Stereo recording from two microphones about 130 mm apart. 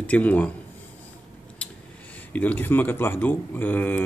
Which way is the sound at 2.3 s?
15° left (ahead or behind).